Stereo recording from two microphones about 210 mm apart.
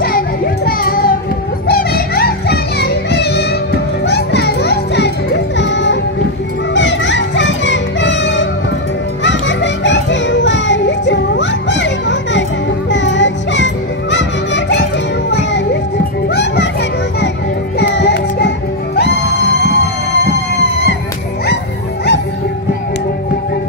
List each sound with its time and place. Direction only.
0.7 s music: 45° left (ahead or behind)
17.7 s music: 55° left (ahead or behind)